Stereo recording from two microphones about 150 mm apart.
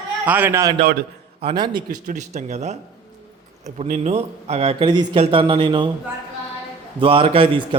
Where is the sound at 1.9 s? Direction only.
55° right (ahead or behind).